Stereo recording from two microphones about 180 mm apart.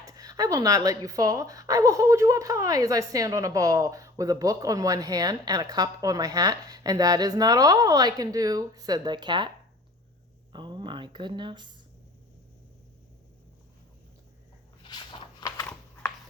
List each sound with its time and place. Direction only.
0.0 s a woman's voice: 20° right (ahead or behind)
10.5 s speech: 25° right (ahead or behind)
14.8 s a sound: 25° left (ahead or behind)